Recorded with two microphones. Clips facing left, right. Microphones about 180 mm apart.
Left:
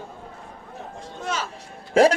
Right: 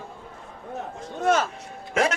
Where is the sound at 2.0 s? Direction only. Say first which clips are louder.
Left 7 dB; 30° left (ahead or behind).